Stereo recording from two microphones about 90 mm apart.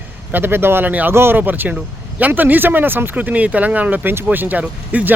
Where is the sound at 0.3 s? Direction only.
25° right (ahead or behind).